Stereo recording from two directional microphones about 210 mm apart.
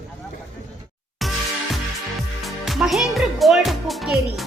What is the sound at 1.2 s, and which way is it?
Music, centre (ahead or behind).